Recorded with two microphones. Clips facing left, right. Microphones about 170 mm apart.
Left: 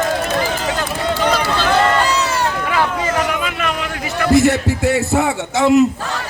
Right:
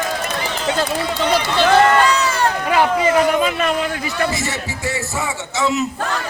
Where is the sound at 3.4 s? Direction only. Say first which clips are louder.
Right 4 dB; 35° right (ahead or behind).